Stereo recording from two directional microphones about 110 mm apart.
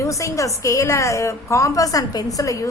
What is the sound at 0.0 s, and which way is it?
A woman's voice, 30° left (ahead or behind).